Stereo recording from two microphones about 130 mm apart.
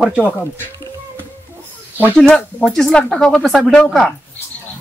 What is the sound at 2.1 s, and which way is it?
Speech, 5° left (ahead or behind).